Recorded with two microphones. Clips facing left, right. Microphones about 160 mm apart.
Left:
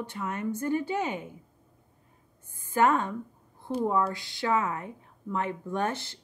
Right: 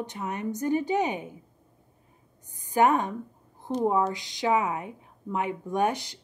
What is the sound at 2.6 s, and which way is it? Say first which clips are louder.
Speech: right 2 dB; 15° right (ahead or behind).